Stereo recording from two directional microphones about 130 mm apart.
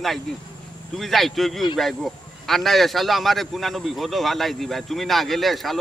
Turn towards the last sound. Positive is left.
turn(degrees=0)  # may be behind; listen again after turning